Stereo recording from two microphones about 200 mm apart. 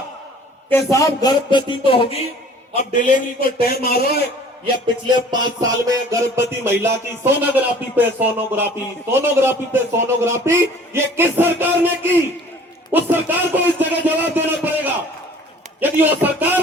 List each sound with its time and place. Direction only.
0.7 s speech: 15° left (ahead or behind)
2.7 s a man's voice: 40° left (ahead or behind)
4.6 s music: 20° right (ahead or behind)